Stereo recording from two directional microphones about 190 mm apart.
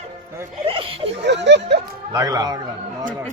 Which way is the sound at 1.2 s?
65° right (ahead or behind).